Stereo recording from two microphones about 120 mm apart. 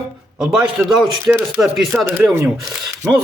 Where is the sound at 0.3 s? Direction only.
5° right (ahead or behind).